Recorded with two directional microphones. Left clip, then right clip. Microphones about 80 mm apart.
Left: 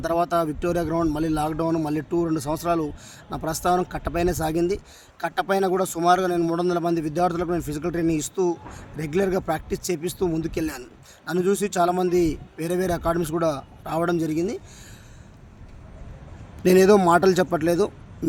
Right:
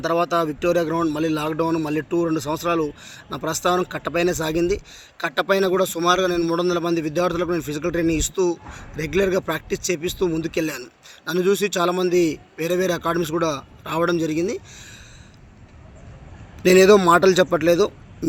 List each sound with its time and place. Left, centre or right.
0.0 s speech: left
16.6 s a man's voice: left